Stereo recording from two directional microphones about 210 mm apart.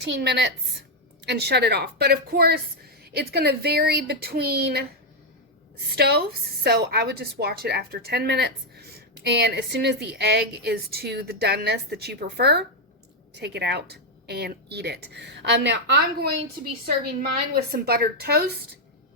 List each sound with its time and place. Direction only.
0.0 s a woman's voice: 55° right (ahead or behind)
5.9 s a woman's voice: 50° right (ahead or behind)
17.5 s a woman's voice: 45° right (ahead or behind)